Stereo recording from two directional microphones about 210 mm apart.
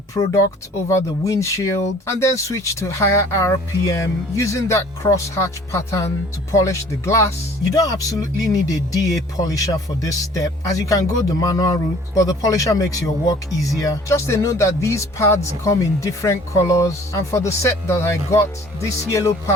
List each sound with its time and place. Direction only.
0.9 s speech: 15° left (ahead or behind)